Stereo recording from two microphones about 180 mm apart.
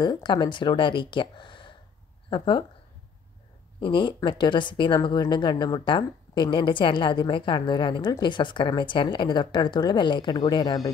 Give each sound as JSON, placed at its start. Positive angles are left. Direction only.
{"t": 0.0, "sound": "a woman's voice", "side_deg": 25}
{"t": 3.8, "sound": "a woman's voice", "side_deg": 25}